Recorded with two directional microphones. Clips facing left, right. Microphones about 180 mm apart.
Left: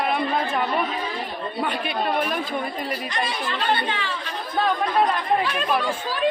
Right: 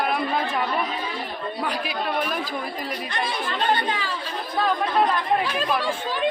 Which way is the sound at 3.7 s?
40° right (ahead or behind).